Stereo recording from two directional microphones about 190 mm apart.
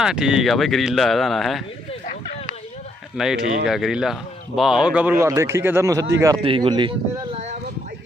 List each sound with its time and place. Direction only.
0.0 s speech: 5° right (ahead or behind)
3.2 s speech: 5° right (ahead or behind); by 7.5 s 30° right (ahead or behind)